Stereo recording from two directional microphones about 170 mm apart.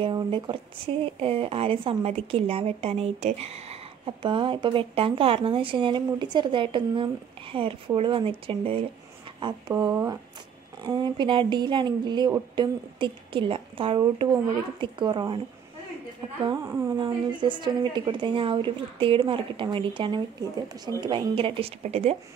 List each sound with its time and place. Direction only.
0.0 s speech: 30° right (ahead or behind)
16.4 s speech: 20° right (ahead or behind); by 22.1 s 35° right (ahead or behind)